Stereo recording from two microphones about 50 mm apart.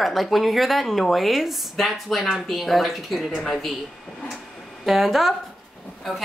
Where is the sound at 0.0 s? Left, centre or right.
Centre.